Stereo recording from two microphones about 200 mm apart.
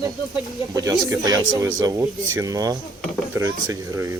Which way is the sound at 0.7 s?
15° right (ahead or behind).